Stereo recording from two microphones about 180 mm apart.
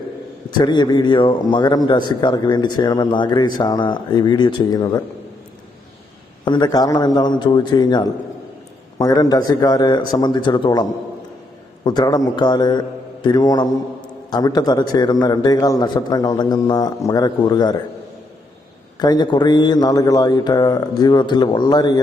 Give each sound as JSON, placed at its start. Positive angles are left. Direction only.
{"t": 0.5, "sound": "a man's voice", "side_deg": 25}
{"t": 6.4, "sound": "a man's voice", "side_deg": 25}
{"t": 18.9, "sound": "a man's voice", "side_deg": 25}